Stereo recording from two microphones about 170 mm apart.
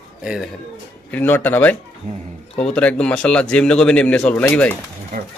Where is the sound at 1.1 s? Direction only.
10° left (ahead or behind).